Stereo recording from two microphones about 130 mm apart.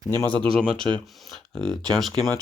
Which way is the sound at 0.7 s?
5° left (ahead or behind).